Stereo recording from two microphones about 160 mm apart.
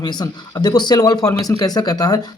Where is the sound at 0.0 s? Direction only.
25° left (ahead or behind).